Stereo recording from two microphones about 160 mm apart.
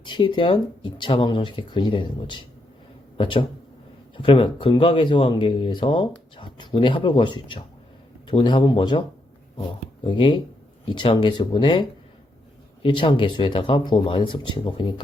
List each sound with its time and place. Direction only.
0.0 s speech: 30° left (ahead or behind)